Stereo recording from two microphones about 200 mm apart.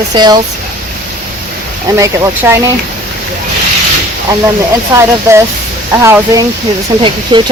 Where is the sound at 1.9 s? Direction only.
15° right (ahead or behind).